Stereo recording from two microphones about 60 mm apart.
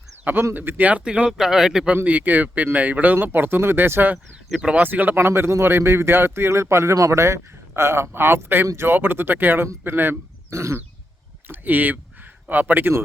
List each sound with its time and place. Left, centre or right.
0.5 s speech: right
0.9 s speech: right
1.3 s speech: centre
2.0 s speech: right
4.4 s speech: centre
4.7 s speech: right
5.1 s a man's voice: right
6.9 s speech: right
7.8 s speech: right
8.6 s a man's voice: right
8.9 s speech: right
10.5 s a man's voice: right
11.4 s speech: right